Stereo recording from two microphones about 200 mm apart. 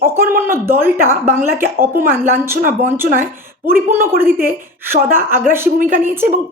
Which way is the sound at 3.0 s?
45° right (ahead or behind).